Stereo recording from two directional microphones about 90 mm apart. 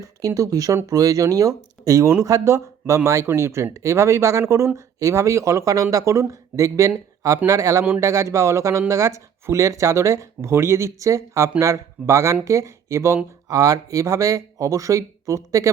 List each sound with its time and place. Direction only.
0.2 s speech: 40° right (ahead or behind)
13.5 s speech: 40° right (ahead or behind)